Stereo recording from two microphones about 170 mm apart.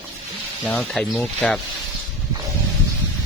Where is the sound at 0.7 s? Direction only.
5° left (ahead or behind).